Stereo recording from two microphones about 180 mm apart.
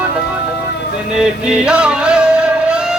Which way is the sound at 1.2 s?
5° right (ahead or behind).